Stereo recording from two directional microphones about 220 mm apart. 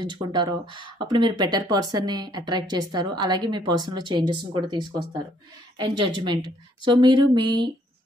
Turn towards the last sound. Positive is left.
turn(degrees=-20)  # may be behind; listen again after turning